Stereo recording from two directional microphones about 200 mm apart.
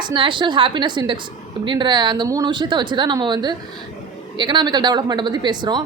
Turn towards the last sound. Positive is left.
turn(degrees=-20)  # may be behind; listen again after turning